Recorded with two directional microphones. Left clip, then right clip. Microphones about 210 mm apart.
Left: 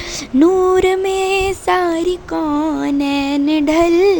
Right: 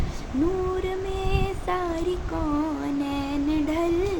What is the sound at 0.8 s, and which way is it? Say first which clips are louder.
Female singing: left 14 dB; 55° left (ahead or behind).